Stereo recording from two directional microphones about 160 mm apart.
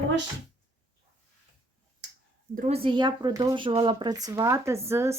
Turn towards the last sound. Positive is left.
turn(degrees=-15)  # may be behind; listen again after turning